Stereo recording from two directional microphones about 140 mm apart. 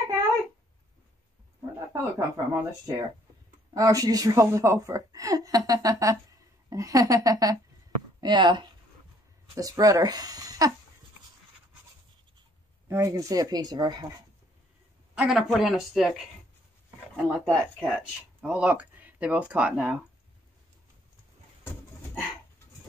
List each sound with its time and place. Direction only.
2.1 s a woman's voice: 25° right (ahead or behind)
12.8 s a woman's voice: 20° right (ahead or behind)
15.1 s speech: centre (ahead or behind)
17.3 s speech: centre (ahead or behind)